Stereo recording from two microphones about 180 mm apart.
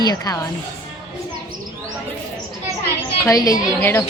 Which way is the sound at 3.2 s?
20° left (ahead or behind).